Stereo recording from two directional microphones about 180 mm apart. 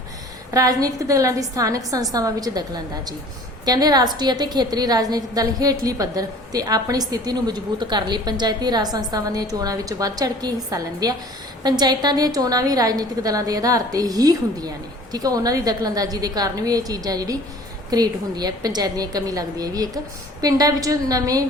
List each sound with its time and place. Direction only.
0.5 s a woman's voice: 20° right (ahead or behind)